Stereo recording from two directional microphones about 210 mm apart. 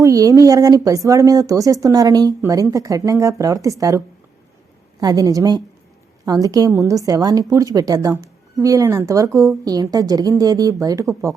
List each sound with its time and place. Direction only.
0.0 s speech: 15° right (ahead or behind)